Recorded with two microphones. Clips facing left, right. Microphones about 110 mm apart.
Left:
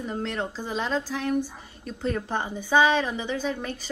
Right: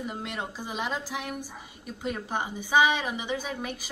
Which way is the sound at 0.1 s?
10° right (ahead or behind).